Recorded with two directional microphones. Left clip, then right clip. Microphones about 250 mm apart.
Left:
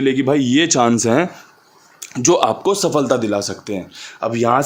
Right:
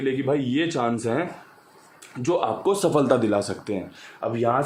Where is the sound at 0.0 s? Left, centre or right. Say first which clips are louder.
Left 8 dB; left.